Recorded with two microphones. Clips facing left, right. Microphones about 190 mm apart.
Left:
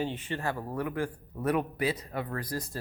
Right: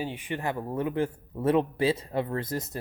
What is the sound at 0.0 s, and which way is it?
Speech, 10° right (ahead or behind).